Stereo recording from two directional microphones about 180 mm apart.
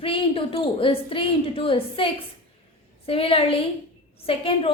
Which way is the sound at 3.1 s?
30° left (ahead or behind).